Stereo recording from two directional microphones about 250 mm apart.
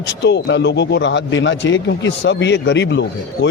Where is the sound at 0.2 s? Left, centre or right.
Left.